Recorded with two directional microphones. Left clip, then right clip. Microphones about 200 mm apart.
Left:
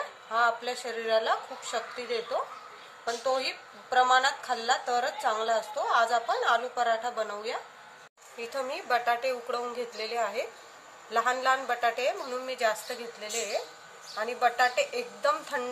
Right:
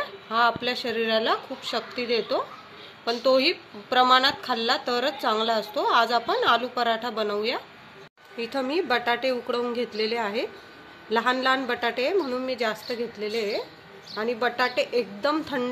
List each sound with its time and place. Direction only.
0.3 s a woman's voice: 25° right (ahead or behind)
14.1 s speech: 30° right (ahead or behind)